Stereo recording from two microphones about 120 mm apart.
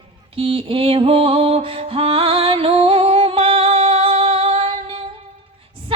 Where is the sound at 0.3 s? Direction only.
50° right (ahead or behind).